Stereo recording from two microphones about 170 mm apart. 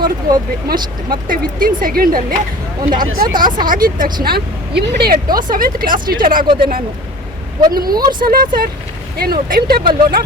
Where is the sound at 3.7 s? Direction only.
55° right (ahead or behind).